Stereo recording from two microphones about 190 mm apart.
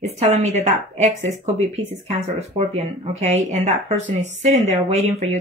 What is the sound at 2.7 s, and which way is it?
Speech, 35° right (ahead or behind).